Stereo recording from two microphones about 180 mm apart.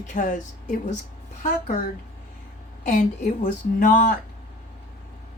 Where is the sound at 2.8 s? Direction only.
45° left (ahead or behind).